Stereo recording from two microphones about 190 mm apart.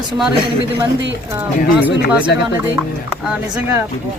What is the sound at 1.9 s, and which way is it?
Speech, 65° left (ahead or behind).